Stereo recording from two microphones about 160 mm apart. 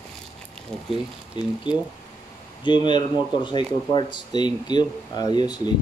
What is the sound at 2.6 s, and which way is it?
Speech, 30° left (ahead or behind).